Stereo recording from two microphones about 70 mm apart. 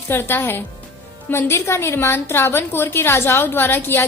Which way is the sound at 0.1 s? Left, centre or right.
Left.